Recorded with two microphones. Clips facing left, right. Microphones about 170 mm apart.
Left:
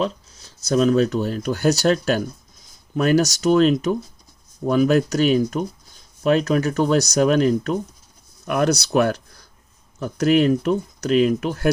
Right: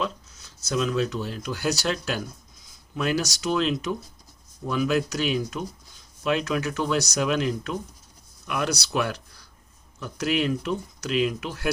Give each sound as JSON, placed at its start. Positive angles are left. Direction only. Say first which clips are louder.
{"t": 0.0, "sound": "speech", "louder": "left 6 dB", "side_deg": 35}